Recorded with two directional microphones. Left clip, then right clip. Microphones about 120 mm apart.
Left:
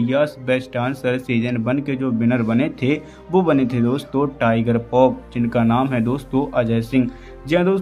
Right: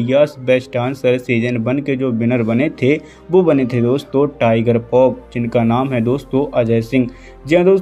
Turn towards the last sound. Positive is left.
turn(degrees=-20)  # may be behind; listen again after turning